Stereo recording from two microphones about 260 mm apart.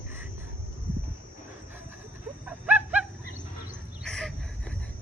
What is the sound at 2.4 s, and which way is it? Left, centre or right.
Wild animals, centre.